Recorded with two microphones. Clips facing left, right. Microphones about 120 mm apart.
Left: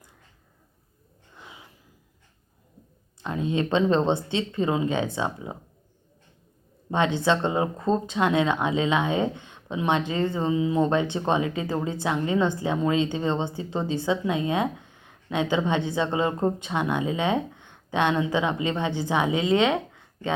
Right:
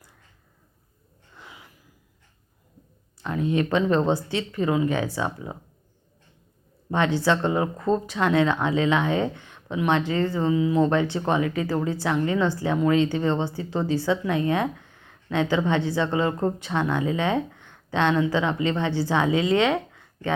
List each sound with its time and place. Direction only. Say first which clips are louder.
1.4 s a sound: even; 20° left (ahead or behind)
3.2 s speech: right 2 dB; 20° left (ahead or behind)
6.9 s speech: right 1 dB; 20° left (ahead or behind)